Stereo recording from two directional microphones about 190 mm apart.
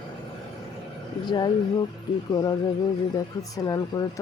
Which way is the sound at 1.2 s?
20° left (ahead or behind).